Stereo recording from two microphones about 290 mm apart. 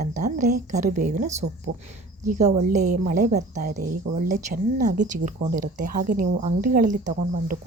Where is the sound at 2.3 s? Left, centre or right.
Right.